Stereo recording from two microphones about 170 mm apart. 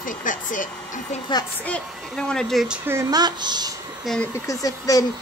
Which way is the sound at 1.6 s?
5° left (ahead or behind).